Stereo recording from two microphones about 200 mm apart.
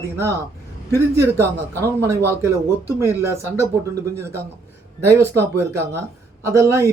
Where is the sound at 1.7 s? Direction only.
15° right (ahead or behind).